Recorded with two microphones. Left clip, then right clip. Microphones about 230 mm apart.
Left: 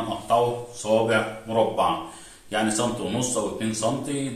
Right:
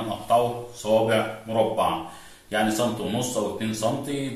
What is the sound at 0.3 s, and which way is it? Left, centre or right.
Speech, centre.